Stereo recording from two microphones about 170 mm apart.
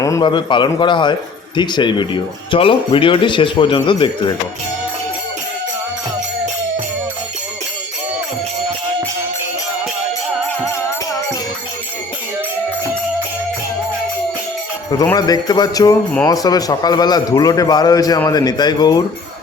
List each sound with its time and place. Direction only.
0.0 s a man's voice: 20° left (ahead or behind)
14.9 s a man's voice: 20° left (ahead or behind)